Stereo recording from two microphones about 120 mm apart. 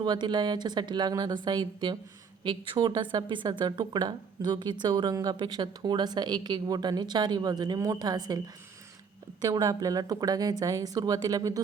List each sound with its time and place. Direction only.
0.0 s speech: 35° right (ahead or behind)
9.4 s speech: 30° right (ahead or behind)